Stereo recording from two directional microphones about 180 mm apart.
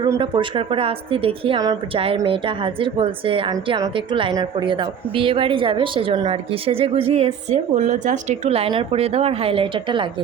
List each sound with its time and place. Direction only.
0.0 s a woman's voice: 25° right (ahead or behind)